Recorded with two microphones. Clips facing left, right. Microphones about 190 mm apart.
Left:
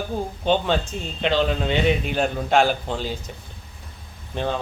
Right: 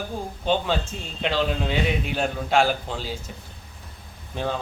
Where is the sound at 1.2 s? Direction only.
Centre (ahead or behind).